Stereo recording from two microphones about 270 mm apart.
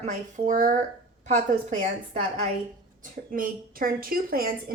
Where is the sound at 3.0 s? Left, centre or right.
Right.